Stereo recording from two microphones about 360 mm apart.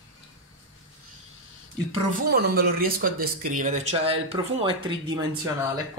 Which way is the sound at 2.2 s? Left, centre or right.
Right.